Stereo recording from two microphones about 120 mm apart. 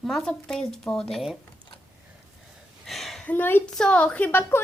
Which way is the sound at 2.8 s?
Centre (ahead or behind).